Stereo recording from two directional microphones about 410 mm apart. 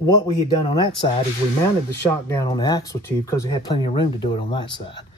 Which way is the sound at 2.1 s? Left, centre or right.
Centre.